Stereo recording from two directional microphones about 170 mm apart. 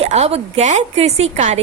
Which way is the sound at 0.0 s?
40° right (ahead or behind).